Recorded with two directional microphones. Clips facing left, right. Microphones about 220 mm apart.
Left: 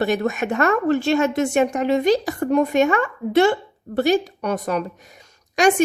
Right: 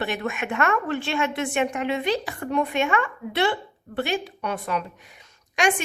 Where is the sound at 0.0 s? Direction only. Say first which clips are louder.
Left 7 dB; 40° left (ahead or behind).